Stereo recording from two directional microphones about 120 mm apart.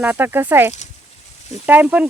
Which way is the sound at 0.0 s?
15° right (ahead or behind).